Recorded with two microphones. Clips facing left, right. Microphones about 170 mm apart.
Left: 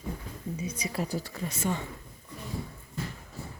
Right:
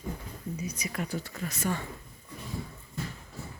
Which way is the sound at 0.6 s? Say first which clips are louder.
Left 3 dB; 30° left (ahead or behind).